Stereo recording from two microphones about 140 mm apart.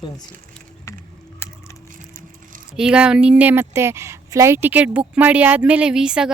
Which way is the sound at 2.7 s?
5° right (ahead or behind).